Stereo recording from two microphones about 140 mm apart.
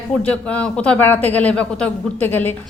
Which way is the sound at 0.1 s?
10° left (ahead or behind).